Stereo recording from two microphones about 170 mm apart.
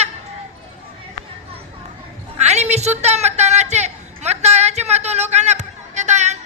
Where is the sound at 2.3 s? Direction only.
40° right (ahead or behind).